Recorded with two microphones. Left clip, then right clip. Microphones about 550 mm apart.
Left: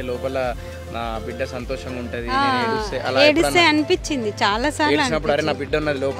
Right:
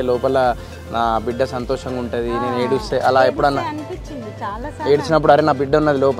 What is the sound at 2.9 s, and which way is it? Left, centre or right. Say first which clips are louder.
Speech: right 2 dB; centre.